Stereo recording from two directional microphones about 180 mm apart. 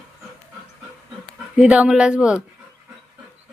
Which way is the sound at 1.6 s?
5° right (ahead or behind).